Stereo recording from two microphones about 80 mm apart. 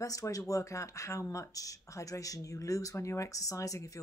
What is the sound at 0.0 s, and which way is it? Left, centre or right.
A woman's voice, left.